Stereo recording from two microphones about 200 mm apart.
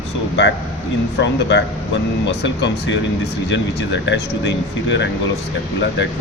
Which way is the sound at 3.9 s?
65° left (ahead or behind).